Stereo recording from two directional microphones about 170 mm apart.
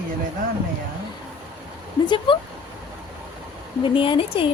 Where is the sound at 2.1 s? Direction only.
30° left (ahead or behind).